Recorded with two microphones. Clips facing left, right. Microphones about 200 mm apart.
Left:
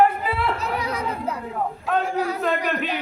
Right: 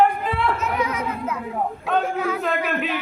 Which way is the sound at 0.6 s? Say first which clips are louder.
Right 2 dB; 35° left (ahead or behind).